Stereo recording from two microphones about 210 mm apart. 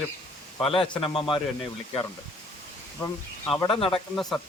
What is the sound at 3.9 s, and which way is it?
Speech, centre (ahead or behind).